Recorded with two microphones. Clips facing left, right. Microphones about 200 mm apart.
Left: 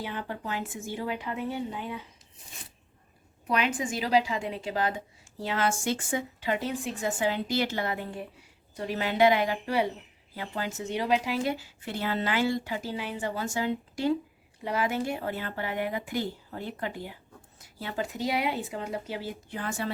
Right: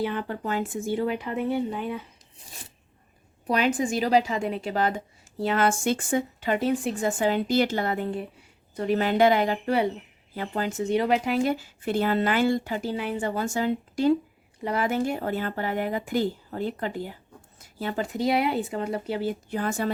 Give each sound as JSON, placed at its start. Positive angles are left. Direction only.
{"t": 0.0, "sound": "speech", "side_deg": -55}
{"t": 3.4, "sound": "speech", "side_deg": -35}
{"t": 14.6, "sound": "speech", "side_deg": -50}